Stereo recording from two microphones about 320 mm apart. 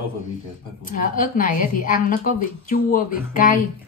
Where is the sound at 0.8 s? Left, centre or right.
Left.